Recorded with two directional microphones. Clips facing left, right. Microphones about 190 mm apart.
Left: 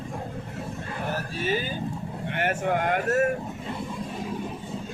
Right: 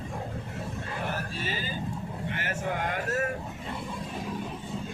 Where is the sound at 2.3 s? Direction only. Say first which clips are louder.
Left 8 dB; 60° left (ahead or behind).